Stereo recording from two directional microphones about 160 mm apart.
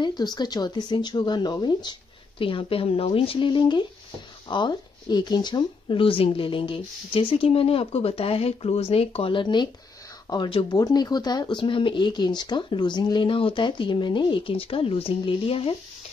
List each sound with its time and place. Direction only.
0.0 s speech: 25° left (ahead or behind)